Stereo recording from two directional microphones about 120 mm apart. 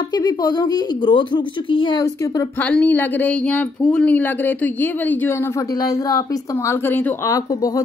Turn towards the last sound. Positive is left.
turn(degrees=30)  # may be behind; listen again after turning